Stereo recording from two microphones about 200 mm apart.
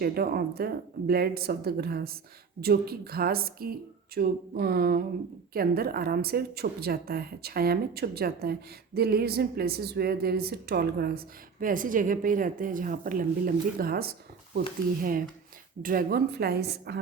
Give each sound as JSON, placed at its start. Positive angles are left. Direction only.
{"t": 0.0, "sound": "a woman's voice", "side_deg": -50}
{"t": 15.8, "sound": "a woman's voice", "side_deg": -45}